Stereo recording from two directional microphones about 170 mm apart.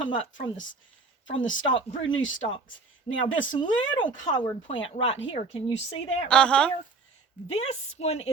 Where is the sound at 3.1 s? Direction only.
30° left (ahead or behind).